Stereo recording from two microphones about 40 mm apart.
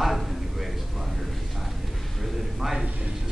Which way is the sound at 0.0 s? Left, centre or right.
Centre.